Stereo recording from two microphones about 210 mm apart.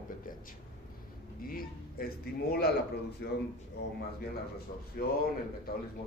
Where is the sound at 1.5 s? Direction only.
45° left (ahead or behind).